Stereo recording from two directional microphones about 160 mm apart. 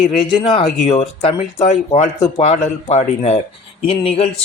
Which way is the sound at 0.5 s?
45° left (ahead or behind).